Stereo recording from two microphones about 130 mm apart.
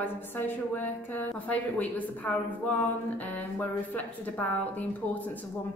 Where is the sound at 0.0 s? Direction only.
15° left (ahead or behind).